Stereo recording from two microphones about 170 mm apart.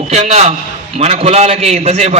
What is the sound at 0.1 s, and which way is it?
A man's voice, 40° right (ahead or behind).